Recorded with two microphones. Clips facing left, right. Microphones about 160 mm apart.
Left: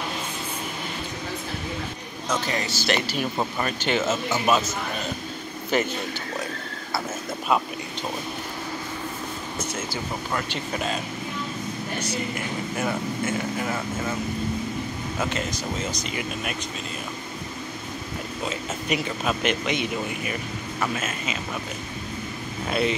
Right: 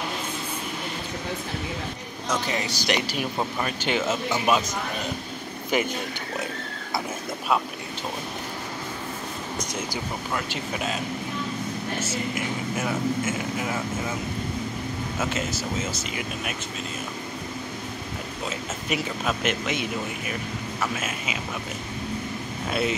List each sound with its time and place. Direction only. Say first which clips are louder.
2.4 s speech: left 1 dB; 20° right (ahead or behind)
5.7 s speech: left 1 dB; 10° right (ahead or behind)
10.3 s speech: left 1 dB; 5° right (ahead or behind)
12.4 s speech: even; 5° right (ahead or behind)
15.1 s speech: left 1 dB; 5° right (ahead or behind)
18.5 s speech: left 2 dB; centre (ahead or behind)
22.7 s speech: left 2 dB; 5° right (ahead or behind)